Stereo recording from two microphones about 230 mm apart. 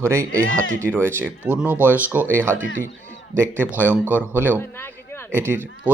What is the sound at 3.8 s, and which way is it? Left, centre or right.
Speech, centre.